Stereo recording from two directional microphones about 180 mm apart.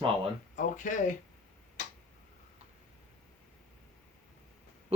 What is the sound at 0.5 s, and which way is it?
Speech, 45° left (ahead or behind).